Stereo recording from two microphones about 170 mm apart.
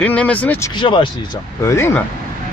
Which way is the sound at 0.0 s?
10° left (ahead or behind).